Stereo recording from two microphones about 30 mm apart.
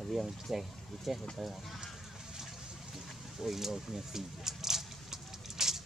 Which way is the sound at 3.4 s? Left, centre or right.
Centre.